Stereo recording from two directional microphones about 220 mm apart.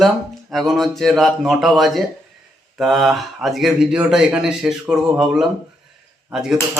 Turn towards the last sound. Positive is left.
turn(degrees=-5)  # may be behind; listen again after turning